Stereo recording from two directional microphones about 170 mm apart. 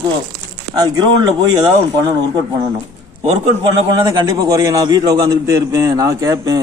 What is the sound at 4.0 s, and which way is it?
A man's voice, 20° right (ahead or behind).